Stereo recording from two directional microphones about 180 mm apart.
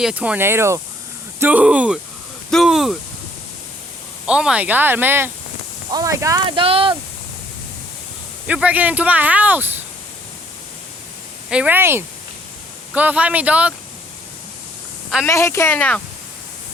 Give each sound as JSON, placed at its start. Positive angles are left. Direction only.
{"t": 0.0, "sound": "speech", "side_deg": -5}
{"t": 4.3, "sound": "speech", "side_deg": -5}
{"t": 8.4, "sound": "speech", "side_deg": -5}
{"t": 11.4, "sound": "speech", "side_deg": -5}
{"t": 15.3, "sound": "speech", "side_deg": 15}